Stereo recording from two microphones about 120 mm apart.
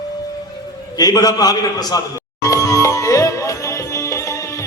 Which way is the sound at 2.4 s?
25° left (ahead or behind).